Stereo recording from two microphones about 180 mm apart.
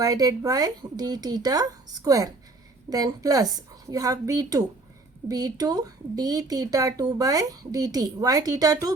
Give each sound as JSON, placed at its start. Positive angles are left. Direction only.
{"t": 0.0, "sound": "speech", "side_deg": -20}